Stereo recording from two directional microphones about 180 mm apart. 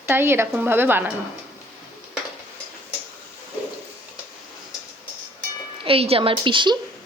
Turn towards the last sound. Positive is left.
turn(degrees=-25)  # may be behind; listen again after turning